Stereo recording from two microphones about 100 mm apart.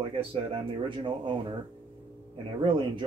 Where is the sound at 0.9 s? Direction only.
55° right (ahead or behind).